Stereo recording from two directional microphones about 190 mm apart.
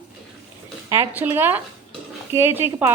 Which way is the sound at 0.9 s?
10° right (ahead or behind).